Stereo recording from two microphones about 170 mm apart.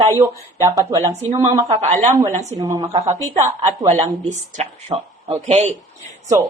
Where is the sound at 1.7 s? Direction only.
40° right (ahead or behind).